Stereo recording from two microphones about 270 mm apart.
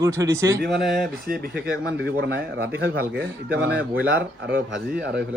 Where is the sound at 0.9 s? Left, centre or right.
Right.